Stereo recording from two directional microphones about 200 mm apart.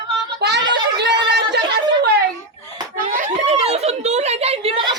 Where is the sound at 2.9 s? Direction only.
40° right (ahead or behind).